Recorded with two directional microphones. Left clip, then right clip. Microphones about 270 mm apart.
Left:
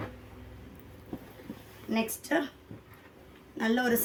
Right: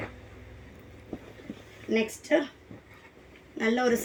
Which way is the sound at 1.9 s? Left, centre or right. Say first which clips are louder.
Right 5 dB; left.